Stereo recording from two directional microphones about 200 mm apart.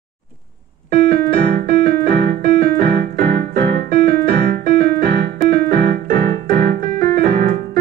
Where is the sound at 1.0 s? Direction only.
55° right (ahead or behind).